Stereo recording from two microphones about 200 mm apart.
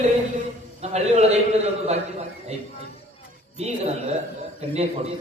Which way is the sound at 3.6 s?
35° right (ahead or behind).